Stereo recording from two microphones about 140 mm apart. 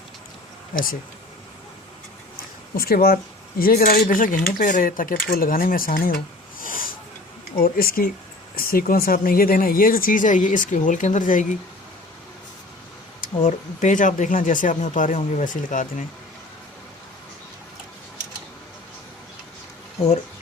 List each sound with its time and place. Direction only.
0.7 s speech: 90° left
2.3 s a sound: 90° left
3.6 s speech: 90° left
6.6 s snort: 80° left
7.6 s speech: 90° left; by 11.4 s 65° left (ahead or behind)
13.4 s speech: 65° left (ahead or behind)